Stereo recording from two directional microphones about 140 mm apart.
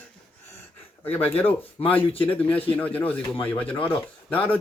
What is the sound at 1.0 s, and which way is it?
Speech, 15° left (ahead or behind).